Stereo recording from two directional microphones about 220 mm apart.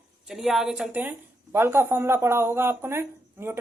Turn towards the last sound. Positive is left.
turn(degrees=-10)  # may be behind; listen again after turning